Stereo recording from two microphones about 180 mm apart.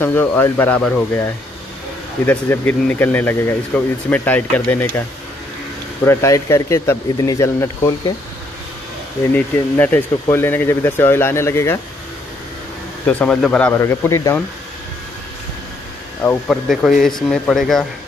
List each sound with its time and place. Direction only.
0.0 s speech: 10° left (ahead or behind)
2.2 s speech: 10° left (ahead or behind)
6.0 s speech: 15° left (ahead or behind)
9.3 s speech: 10° left (ahead or behind)
13.0 s speech: 10° left (ahead or behind)
16.4 s speech: centre (ahead or behind)